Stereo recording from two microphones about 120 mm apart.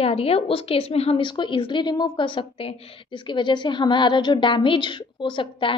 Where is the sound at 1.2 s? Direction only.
40° left (ahead or behind).